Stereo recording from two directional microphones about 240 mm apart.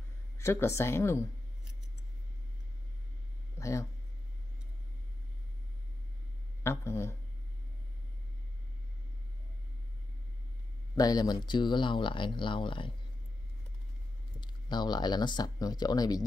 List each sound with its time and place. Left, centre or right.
0.4 s speech: centre
3.5 s a sound: centre
6.6 s speech: centre
11.0 s speech: centre
14.4 s speech: centre